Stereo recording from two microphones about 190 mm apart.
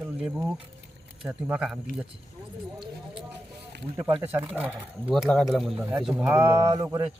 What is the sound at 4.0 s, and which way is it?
Speech, 25° right (ahead or behind).